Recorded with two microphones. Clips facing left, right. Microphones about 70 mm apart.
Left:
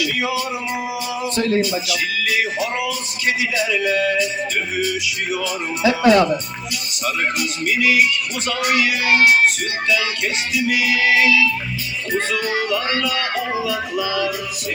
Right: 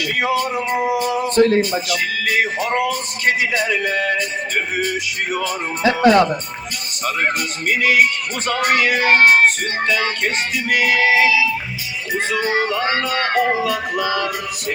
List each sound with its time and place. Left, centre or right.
0.0 s speech: right
11.0 s music: right
12.3 s speech: right